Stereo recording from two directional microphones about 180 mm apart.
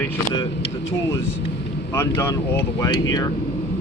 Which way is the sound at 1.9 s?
15° left (ahead or behind).